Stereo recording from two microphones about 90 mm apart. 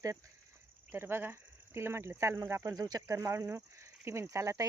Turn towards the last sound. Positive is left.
turn(degrees=-35)  # may be behind; listen again after turning